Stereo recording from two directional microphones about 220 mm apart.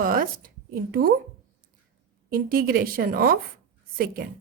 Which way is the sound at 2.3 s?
40° right (ahead or behind).